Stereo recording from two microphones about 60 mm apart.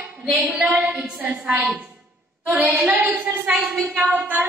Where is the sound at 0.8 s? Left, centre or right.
Centre.